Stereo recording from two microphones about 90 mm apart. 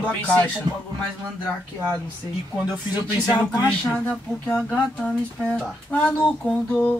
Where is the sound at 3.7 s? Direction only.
15° left (ahead or behind).